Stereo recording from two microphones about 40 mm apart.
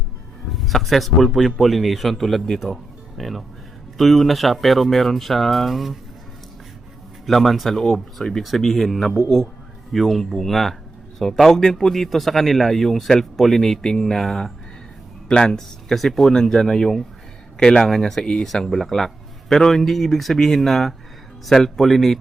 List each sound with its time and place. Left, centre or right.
0.5 s speech: centre
7.3 s a man's voice: centre
15.9 s a man's voice: centre
17.6 s speech: centre
17.8 s a man's voice: centre